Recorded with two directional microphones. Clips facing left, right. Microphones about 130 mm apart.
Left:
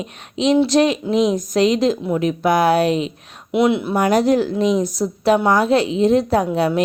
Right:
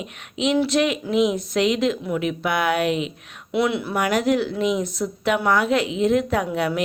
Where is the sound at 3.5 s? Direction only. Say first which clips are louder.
Left 5 dB; 20° left (ahead or behind).